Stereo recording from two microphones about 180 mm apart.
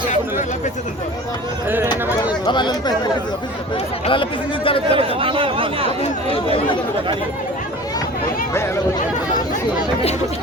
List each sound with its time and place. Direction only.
2.5 s speech: 25° left (ahead or behind)
4.0 s speech: 30° left (ahead or behind)
4.9 s speech: 30° right (ahead or behind)
6.0 s speech: 30° left (ahead or behind)